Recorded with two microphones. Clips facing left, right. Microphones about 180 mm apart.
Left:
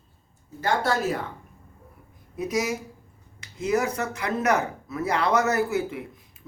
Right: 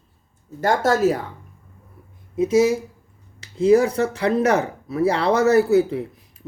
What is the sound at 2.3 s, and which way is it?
Speech, 25° right (ahead or behind).